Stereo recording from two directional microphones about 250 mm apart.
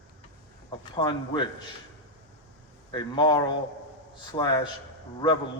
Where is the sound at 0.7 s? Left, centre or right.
Centre.